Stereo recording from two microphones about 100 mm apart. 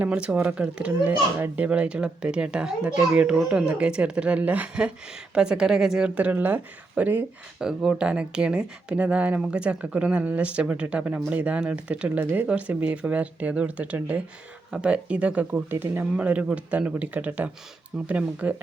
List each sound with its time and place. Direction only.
0.0 s speech: 10° right (ahead or behind)
6.1 s speech: 15° right (ahead or behind)
7.6 s speech: 5° right (ahead or behind)